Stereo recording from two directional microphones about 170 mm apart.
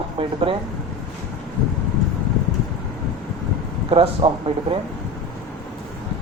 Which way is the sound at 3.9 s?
35° right (ahead or behind).